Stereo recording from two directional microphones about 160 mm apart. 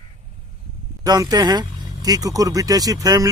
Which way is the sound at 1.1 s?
25° right (ahead or behind).